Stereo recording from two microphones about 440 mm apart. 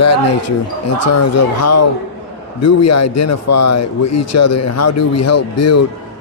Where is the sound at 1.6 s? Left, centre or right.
Left.